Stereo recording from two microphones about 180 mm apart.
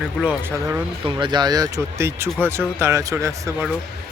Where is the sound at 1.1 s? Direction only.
25° right (ahead or behind).